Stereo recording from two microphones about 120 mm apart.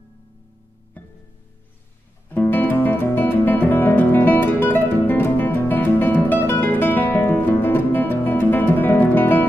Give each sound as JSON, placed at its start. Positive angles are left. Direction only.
{"t": 1.0, "sound": "music", "side_deg": 15}
{"t": 2.2, "sound": "music", "side_deg": 15}